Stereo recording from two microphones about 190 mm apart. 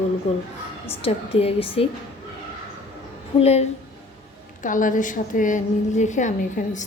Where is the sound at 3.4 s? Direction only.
35° left (ahead or behind).